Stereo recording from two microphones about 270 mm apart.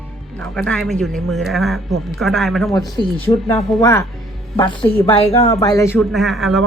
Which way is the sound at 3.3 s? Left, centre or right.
Left.